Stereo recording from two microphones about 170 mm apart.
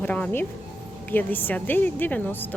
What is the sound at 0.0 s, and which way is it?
Speech, 10° left (ahead or behind).